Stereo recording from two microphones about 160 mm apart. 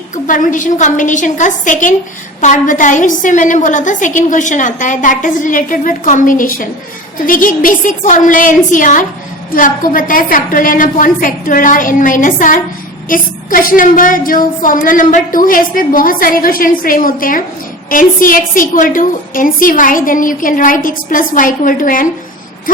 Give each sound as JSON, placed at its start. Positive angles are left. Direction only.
{"t": 0.3, "sound": "a woman's voice", "side_deg": 55}